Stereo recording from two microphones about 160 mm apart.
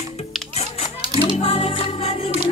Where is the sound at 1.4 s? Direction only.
35° left (ahead or behind).